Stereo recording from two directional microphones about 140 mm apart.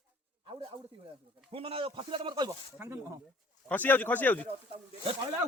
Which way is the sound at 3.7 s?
10° left (ahead or behind).